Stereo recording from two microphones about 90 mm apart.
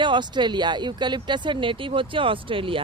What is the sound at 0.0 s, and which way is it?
Speech, 60° right (ahead or behind).